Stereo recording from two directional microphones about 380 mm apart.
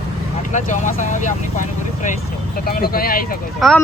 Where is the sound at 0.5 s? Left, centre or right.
Centre.